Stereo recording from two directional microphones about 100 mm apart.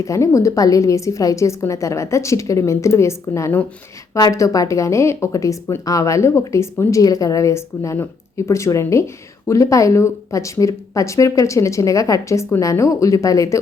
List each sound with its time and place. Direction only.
0.0 s speech: 30° left (ahead or behind)